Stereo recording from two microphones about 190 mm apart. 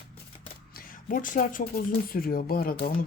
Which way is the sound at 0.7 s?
50° left (ahead or behind).